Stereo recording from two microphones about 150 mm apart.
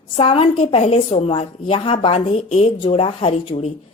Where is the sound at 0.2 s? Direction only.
40° left (ahead or behind).